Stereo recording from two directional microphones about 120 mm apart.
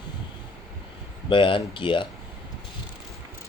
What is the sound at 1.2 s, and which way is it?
Speech, 45° left (ahead or behind).